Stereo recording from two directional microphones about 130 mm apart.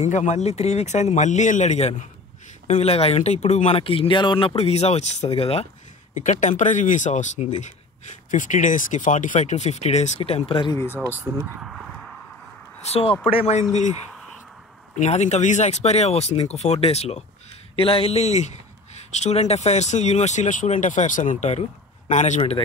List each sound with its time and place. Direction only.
0.0 s speech: 65° left (ahead or behind); by 5.7 s 50° left (ahead or behind)
6.1 s speech: 70° left (ahead or behind); by 10.7 s 45° left (ahead or behind)
11.3 s speech: 10° right (ahead or behind)
12.8 s speech: 50° left (ahead or behind)
15.0 s speech: 60° left (ahead or behind)